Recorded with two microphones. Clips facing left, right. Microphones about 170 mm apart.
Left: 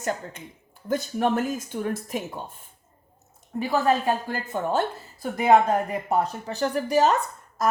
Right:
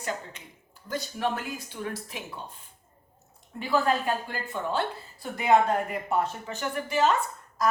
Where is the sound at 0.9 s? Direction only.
50° left (ahead or behind).